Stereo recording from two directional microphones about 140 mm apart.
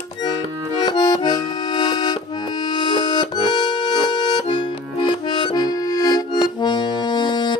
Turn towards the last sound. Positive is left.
turn(degrees=30)  # may be behind; listen again after turning